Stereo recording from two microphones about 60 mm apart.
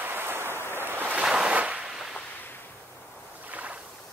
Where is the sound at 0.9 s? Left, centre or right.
Right.